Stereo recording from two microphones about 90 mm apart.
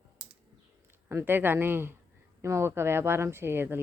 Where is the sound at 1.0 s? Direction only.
25° right (ahead or behind).